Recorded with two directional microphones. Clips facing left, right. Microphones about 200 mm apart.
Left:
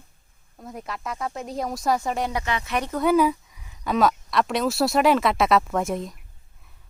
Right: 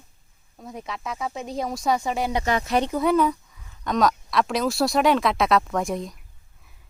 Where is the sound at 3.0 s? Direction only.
5° left (ahead or behind).